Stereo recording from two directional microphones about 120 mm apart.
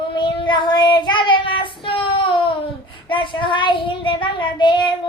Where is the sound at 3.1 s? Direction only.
40° left (ahead or behind).